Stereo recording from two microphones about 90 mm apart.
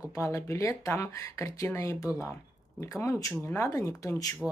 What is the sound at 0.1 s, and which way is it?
Speech, 35° left (ahead or behind).